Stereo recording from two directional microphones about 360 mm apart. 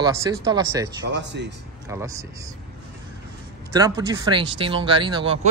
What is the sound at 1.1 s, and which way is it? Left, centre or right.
Speech, right.